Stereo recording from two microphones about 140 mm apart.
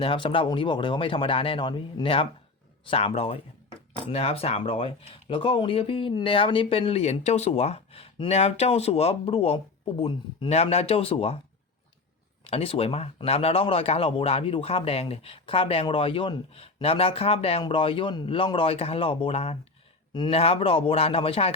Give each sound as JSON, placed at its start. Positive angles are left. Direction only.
{"t": 0.0, "sound": "speech", "side_deg": 40}
{"t": 12.5, "sound": "speech", "side_deg": 45}